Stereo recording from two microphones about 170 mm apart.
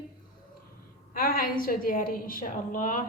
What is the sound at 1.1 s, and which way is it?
A woman's voice, 60° left (ahead or behind).